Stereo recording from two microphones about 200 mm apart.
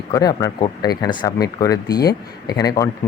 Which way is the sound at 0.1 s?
20° left (ahead or behind).